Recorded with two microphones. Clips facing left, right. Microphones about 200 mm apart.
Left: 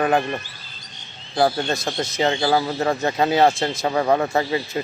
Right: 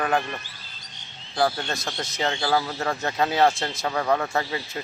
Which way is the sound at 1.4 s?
30° left (ahead or behind).